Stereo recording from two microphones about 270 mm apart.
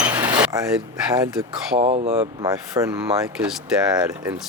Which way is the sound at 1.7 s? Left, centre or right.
Right.